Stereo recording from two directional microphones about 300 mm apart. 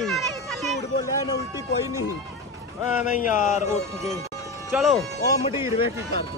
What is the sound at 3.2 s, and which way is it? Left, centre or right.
Speech, left.